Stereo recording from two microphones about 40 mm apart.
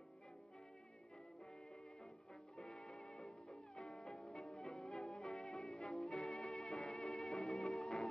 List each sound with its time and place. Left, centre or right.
2.5 s music: centre